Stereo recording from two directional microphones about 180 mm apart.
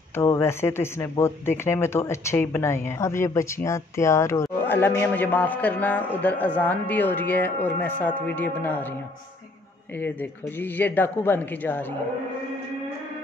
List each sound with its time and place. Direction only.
0.1 s speech: 15° left (ahead or behind)
9.9 s speech: 10° left (ahead or behind)